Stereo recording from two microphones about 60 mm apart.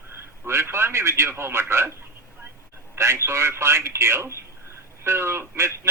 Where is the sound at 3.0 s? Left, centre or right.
Right.